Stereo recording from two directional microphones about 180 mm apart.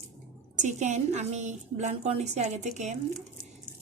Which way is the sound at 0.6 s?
40° right (ahead or behind).